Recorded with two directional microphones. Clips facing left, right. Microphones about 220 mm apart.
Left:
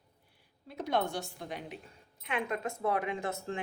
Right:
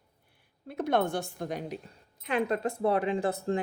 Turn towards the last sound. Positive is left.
turn(degrees=-35)  # may be behind; listen again after turning